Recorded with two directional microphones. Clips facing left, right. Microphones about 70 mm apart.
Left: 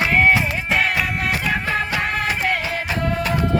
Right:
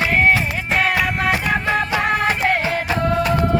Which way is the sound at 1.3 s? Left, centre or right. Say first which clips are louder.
Right 3 dB; right.